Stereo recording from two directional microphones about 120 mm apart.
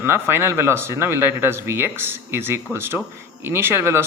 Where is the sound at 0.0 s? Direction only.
20° right (ahead or behind).